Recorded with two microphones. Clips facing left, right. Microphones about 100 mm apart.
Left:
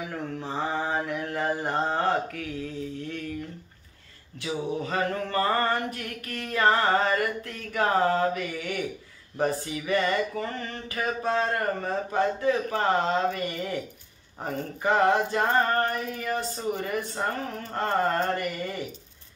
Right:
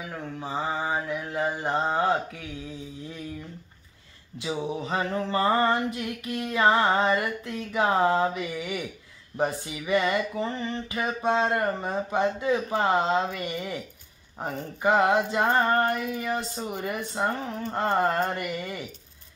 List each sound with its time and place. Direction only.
0.1 s mantra: 5° right (ahead or behind)
4.8 s mantra: 20° right (ahead or behind)
8.4 s speech: 5° right (ahead or behind)
9.7 s mantra: 10° right (ahead or behind)
10.4 s mantra: 20° right (ahead or behind)